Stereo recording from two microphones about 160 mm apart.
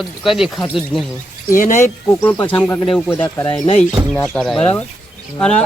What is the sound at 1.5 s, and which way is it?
Speech, 55° left (ahead or behind).